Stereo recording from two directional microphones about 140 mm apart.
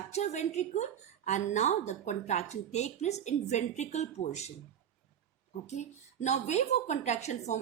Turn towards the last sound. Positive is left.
turn(degrees=55)  # may be behind; listen again after turning